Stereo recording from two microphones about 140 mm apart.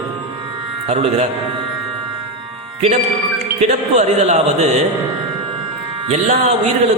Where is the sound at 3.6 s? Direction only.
50° right (ahead or behind).